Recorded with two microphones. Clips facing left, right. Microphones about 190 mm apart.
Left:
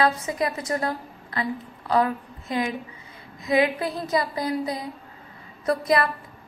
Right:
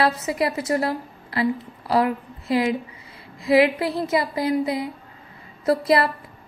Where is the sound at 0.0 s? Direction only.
25° right (ahead or behind).